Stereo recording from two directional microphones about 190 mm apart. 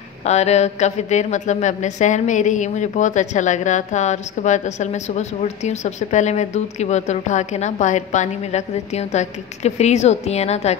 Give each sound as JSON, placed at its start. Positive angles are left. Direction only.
{"t": 0.2, "sound": "speech", "side_deg": 35}